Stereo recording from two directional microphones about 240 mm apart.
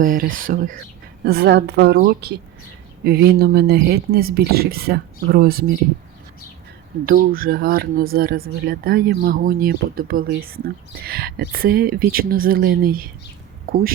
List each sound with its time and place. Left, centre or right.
0.0 s a woman's voice: right
7.0 s speech: right